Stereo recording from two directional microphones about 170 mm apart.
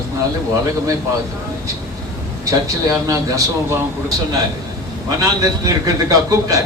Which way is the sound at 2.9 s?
20° right (ahead or behind).